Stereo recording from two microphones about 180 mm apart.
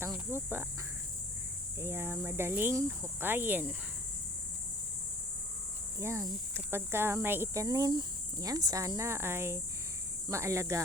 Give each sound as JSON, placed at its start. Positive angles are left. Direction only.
{"t": 0.3, "sound": "cricket", "side_deg": -15}
{"t": 1.8, "sound": "speech", "side_deg": -15}
{"t": 6.0, "sound": "speech", "side_deg": -15}